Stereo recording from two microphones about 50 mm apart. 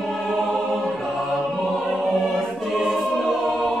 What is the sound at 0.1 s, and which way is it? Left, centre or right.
Music, centre.